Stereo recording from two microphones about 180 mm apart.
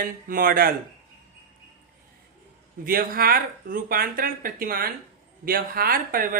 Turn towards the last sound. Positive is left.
turn(degrees=-55)  # may be behind; listen again after turning